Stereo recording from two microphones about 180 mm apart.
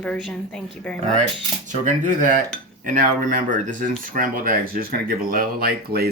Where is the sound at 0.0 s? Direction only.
5° left (ahead or behind).